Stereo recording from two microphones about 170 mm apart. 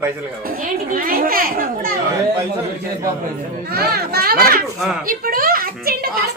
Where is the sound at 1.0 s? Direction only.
60° right (ahead or behind).